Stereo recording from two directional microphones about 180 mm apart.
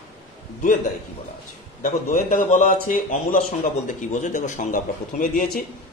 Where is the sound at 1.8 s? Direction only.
45° left (ahead or behind).